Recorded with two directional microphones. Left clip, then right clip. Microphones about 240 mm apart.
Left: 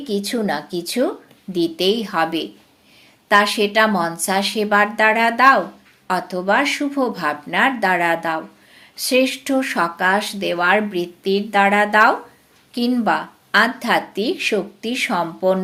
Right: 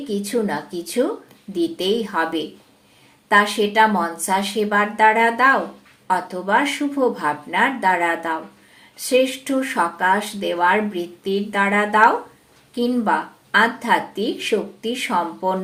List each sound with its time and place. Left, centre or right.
0.1 s speech: left